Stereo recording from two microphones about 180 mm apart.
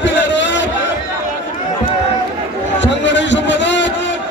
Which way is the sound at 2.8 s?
85° left.